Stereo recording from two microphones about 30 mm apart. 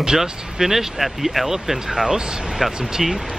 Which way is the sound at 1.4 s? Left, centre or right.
Centre.